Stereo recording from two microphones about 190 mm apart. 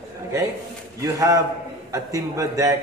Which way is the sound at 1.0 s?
15° right (ahead or behind).